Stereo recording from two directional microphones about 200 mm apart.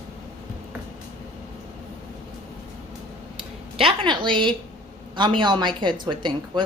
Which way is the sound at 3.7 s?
25° right (ahead or behind).